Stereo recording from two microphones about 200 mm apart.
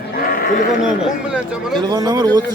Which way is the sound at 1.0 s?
5° right (ahead or behind).